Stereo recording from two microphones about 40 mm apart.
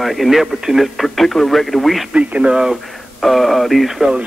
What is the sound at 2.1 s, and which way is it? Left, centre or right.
Speech, right.